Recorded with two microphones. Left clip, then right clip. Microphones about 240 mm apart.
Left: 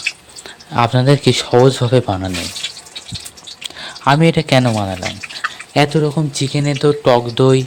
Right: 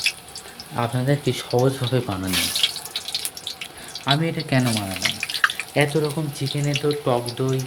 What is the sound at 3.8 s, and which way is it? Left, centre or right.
Speech, left.